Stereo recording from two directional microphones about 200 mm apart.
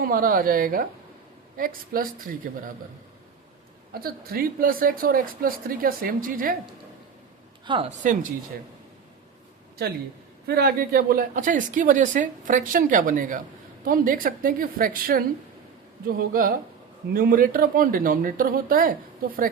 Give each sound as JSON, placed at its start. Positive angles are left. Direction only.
{"t": 0.0, "sound": "speech", "side_deg": -45}
{"t": 4.0, "sound": "speech", "side_deg": -50}
{"t": 7.6, "sound": "a woman's voice", "side_deg": -25}
{"t": 10.4, "sound": "a woman's voice", "side_deg": -50}